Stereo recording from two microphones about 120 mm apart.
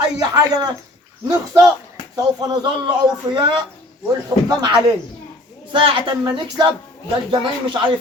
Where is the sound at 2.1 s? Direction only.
30° right (ahead or behind).